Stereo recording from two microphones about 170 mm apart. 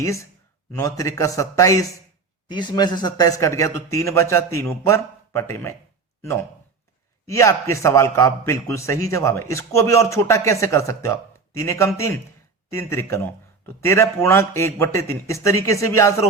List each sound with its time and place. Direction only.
0.8 s a man's voice: 20° left (ahead or behind)
7.3 s a man's voice: 15° left (ahead or behind)